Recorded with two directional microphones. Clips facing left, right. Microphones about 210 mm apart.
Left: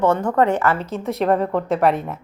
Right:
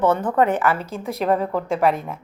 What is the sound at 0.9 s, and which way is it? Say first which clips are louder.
A woman's voice: left 2 dB; centre (ahead or behind).